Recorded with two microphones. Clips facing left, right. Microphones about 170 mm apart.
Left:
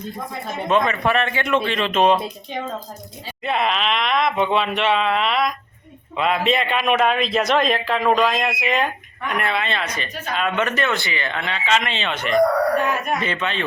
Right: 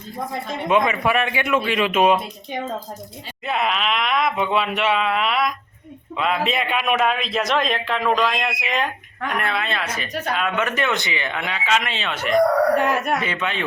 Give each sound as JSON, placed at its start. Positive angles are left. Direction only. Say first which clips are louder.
{"t": 0.7, "sound": "speech", "louder": "even", "side_deg": -15}
{"t": 3.4, "sound": "a man's voice", "louder": "left 1 dB", "side_deg": -5}
{"t": 12.8, "sound": "speech", "louder": "right 2 dB", "side_deg": -75}
{"t": 13.1, "sound": "speech", "louder": "even", "side_deg": -10}